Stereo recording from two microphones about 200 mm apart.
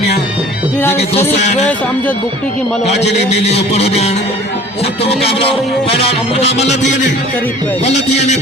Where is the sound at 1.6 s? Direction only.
10° left (ahead or behind).